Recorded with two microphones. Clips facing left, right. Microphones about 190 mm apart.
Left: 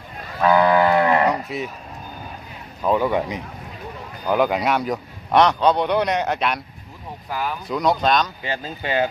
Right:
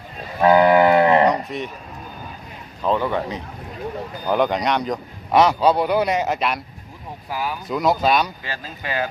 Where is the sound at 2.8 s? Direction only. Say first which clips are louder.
Left 1 dB; 10° left (ahead or behind).